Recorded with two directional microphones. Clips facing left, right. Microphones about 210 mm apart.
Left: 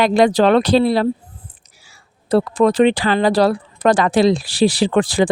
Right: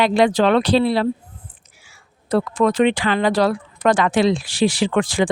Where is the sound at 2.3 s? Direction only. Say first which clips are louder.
Left 3 dB; 35° left (ahead or behind).